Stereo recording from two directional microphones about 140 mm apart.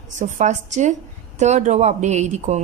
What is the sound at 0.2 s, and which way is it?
A woman's voice, 60° right (ahead or behind).